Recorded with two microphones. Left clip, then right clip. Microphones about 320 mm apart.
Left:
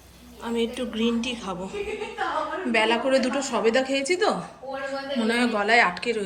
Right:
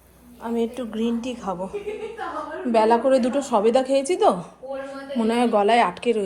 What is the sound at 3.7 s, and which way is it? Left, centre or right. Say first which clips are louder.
Speech: right 1 dB; right.